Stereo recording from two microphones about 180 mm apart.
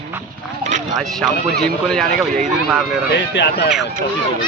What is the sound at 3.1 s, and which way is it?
Speech, 70° left (ahead or behind).